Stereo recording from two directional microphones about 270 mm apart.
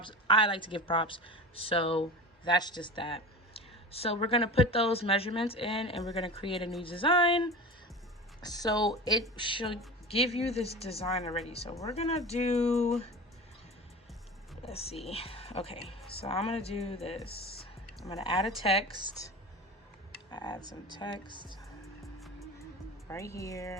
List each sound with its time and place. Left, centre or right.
0.0 s a woman's voice: centre
11.7 s speech: centre
11.9 s a woman's voice: left
14.6 s a woman's voice: left
20.3 s speech: centre
23.0 s speech: centre